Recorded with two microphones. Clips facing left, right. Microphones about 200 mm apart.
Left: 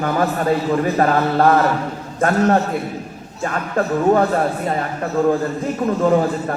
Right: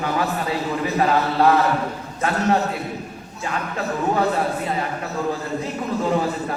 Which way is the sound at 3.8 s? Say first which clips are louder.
Left 9 dB; 50° left (ahead or behind).